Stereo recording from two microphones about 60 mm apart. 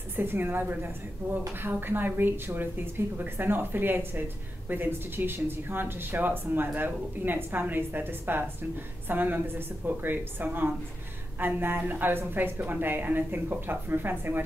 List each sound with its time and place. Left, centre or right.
0.1 s a woman's voice: right